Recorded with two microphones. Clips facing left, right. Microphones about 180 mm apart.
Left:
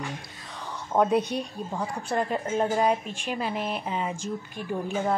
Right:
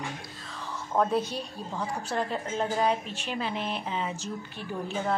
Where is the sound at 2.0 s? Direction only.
5° left (ahead or behind).